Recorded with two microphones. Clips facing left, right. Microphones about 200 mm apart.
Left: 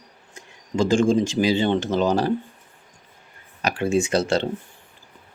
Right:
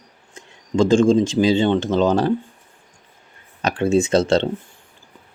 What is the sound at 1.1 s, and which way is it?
Speech, 20° right (ahead or behind).